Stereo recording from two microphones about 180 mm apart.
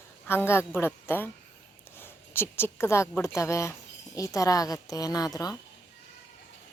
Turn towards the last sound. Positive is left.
turn(degrees=20)  # may be behind; listen again after turning